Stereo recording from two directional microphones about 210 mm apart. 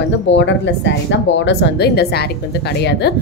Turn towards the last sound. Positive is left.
turn(degrees=50)  # may be behind; listen again after turning